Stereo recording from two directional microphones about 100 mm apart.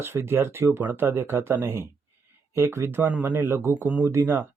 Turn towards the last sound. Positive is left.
turn(degrees=-25)  # may be behind; listen again after turning